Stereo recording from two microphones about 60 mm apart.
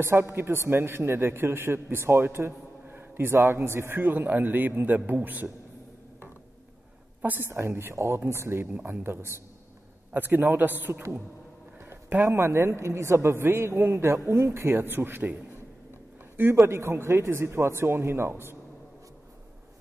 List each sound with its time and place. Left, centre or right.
0.0 s a man's voice: right
3.3 s a man's voice: right
7.2 s a woman's voice: right
7.4 s a woman's voice: right
10.1 s a man's voice: right
12.3 s a woman's voice: right
16.6 s a woman's voice: right